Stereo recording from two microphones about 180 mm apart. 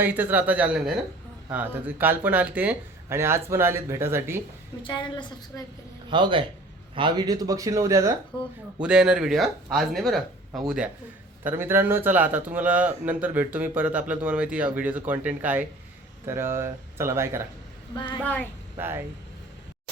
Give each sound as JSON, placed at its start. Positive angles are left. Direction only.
{"t": 0.0, "sound": "a man's voice", "side_deg": -10}
{"t": 4.8, "sound": "a woman's voice", "side_deg": 25}
{"t": 6.1, "sound": "speech", "side_deg": -25}
{"t": 8.8, "sound": "speech", "side_deg": -5}
{"t": 11.4, "sound": "a man's voice", "side_deg": -10}
{"t": 17.9, "sound": "a woman's voice", "side_deg": 25}
{"t": 18.2, "sound": "speech", "side_deg": 10}
{"t": 18.8, "sound": "a man's voice", "side_deg": -10}